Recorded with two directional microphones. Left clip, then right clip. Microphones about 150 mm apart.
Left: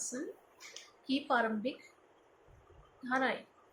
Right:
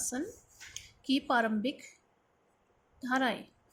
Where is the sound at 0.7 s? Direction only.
55° right (ahead or behind).